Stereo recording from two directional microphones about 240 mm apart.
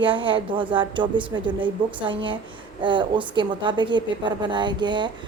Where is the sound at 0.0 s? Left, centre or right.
Right.